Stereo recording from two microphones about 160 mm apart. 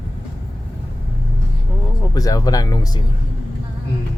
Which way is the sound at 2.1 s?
20° left (ahead or behind).